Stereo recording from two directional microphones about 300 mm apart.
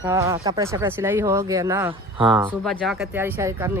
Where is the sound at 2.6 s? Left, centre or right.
Centre.